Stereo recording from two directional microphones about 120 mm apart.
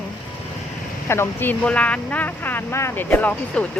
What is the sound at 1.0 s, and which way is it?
Speech, 20° left (ahead or behind).